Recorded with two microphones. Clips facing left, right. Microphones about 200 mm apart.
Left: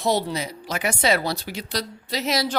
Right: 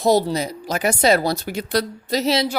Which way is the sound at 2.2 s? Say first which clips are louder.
Right 4 dB; 30° right (ahead or behind).